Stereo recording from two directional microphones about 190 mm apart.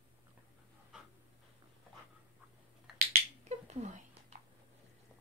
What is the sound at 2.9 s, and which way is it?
Finger snapping, 35° right (ahead or behind).